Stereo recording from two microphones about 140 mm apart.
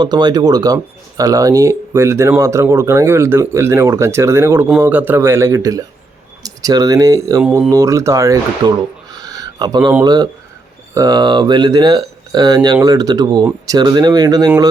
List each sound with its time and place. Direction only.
0.0 s speech: 30° right (ahead or behind)
9.1 s a sound: 25° right (ahead or behind)
10.0 s speech: 30° right (ahead or behind)